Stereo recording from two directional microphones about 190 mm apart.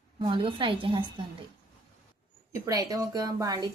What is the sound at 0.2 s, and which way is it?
Speech, 25° right (ahead or behind).